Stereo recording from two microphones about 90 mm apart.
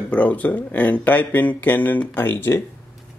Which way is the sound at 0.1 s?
15° left (ahead or behind).